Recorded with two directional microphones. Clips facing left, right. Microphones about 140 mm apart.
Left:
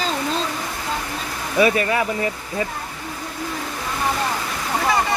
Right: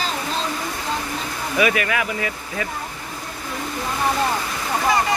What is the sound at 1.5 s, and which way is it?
Speech, 35° left (ahead or behind).